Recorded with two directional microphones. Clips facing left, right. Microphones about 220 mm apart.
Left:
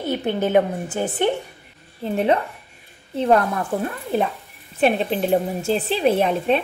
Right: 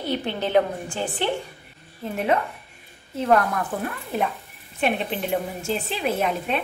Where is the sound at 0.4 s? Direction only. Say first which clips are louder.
Left 2 dB; 10° left (ahead or behind).